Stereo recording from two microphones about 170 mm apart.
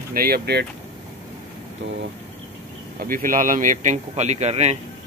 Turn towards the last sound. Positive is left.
turn(degrees=-40)  # may be behind; listen again after turning